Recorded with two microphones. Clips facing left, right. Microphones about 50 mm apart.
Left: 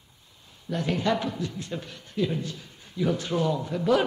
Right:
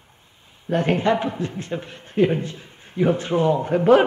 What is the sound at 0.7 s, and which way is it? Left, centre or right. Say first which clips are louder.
A man's voice: right 7 dB; right.